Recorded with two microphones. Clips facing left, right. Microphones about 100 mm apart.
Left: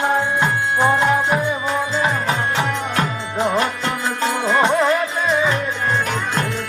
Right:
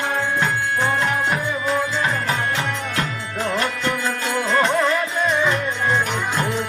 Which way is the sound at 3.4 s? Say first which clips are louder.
Left 4 dB; 15° left (ahead or behind).